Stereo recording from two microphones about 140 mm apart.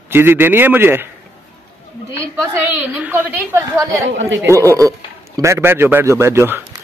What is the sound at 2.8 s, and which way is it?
Speech, 15° right (ahead or behind).